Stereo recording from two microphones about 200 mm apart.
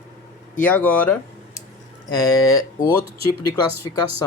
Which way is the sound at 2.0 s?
20° left (ahead or behind).